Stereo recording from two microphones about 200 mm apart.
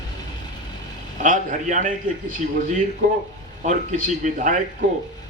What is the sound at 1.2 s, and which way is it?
Speech, 40° right (ahead or behind).